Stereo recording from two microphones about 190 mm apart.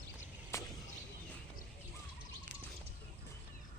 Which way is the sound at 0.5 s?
15° left (ahead or behind).